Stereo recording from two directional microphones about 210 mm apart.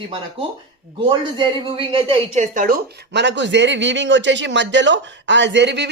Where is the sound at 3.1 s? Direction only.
55° right (ahead or behind).